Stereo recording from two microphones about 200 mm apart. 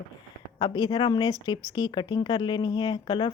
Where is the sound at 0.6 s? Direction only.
25° left (ahead or behind).